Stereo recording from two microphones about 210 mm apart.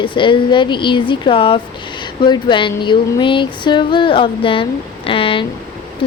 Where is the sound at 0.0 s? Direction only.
25° left (ahead or behind).